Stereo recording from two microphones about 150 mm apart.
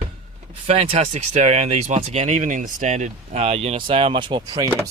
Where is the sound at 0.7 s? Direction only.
40° right (ahead or behind); by 4.7 s 25° right (ahead or behind).